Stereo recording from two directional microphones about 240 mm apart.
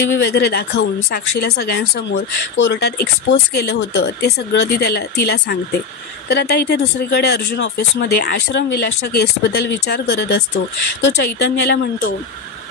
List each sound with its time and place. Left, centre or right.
0.2 s speech: left